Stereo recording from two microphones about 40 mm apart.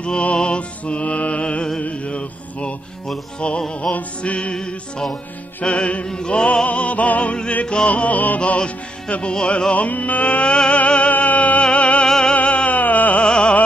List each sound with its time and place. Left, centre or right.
0.0 s music: left
1.4 s music: left
1.8 s mantra: left
3.3 s music: left
3.9 s music: centre
4.2 s music: left
7.6 s music: centre
7.9 s music: left
8.5 s music: left
9.8 s music: left
11.1 s music: left
12.1 s music: centre
12.4 s music: left
13.2 s music: left